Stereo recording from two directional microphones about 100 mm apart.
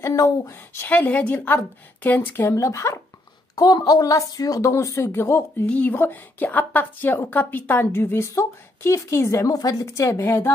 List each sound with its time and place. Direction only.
0.0 s a woman's voice: 30° left (ahead or behind)